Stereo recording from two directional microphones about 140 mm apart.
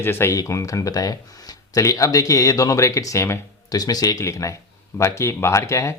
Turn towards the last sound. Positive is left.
turn(degrees=20)  # may be behind; listen again after turning